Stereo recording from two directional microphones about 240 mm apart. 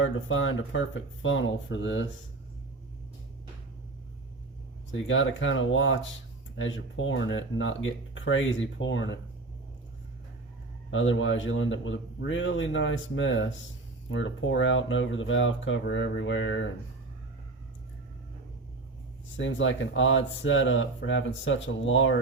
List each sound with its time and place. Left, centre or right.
0.3 s speech: left
4.9 s speech: left
10.9 s speech: left
19.4 s speech: left